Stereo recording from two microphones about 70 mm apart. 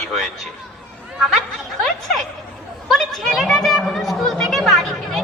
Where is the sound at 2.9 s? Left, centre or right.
Centre.